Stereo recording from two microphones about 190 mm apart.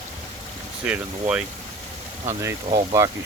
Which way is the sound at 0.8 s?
5° right (ahead or behind).